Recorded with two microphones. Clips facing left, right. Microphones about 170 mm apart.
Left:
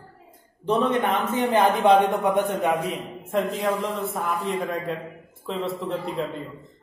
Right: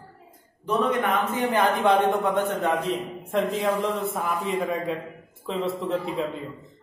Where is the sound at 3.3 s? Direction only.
Centre (ahead or behind).